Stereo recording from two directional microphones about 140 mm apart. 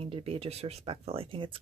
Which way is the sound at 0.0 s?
45° right (ahead or behind).